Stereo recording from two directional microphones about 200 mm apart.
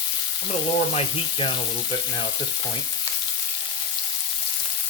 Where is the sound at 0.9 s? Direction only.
30° left (ahead or behind).